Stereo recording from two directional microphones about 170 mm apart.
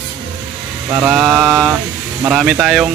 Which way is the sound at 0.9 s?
15° right (ahead or behind).